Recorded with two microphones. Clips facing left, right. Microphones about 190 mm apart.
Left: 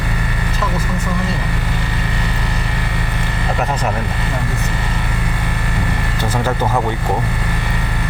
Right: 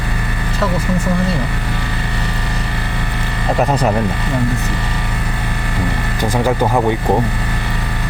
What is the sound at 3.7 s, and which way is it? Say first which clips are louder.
Vehicle: right 5 dB; 35° right (ahead or behind).